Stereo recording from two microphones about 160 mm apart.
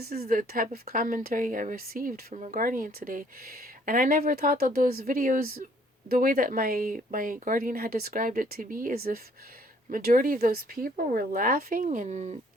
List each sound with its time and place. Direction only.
0.0 s speech: 70° right (ahead or behind); by 12.4 s 45° right (ahead or behind)